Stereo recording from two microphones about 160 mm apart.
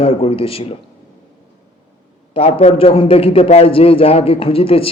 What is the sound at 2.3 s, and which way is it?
A man's voice, 35° left (ahead or behind).